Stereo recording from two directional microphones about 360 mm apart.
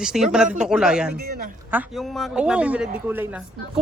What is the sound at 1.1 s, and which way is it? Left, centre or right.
Speech, right.